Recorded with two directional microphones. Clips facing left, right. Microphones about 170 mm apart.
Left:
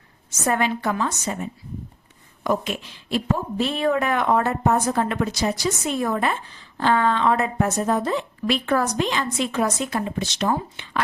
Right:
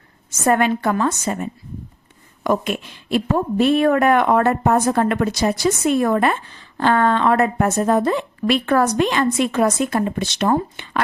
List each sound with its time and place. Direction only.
0.3 s a woman's voice: 55° right (ahead or behind)